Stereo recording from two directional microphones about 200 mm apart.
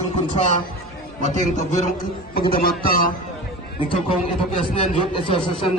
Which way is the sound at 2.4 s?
50° left (ahead or behind).